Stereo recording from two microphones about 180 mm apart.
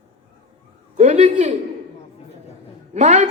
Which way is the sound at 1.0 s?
40° right (ahead or behind).